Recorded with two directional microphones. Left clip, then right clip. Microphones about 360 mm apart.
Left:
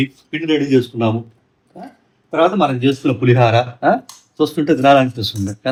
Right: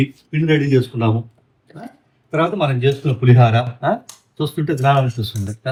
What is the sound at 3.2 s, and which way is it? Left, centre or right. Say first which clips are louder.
Speech: left 3 dB; centre.